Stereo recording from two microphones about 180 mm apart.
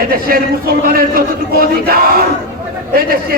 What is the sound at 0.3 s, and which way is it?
Speech, 55° right (ahead or behind).